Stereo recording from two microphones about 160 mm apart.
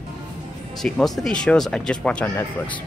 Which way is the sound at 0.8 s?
Centre (ahead or behind).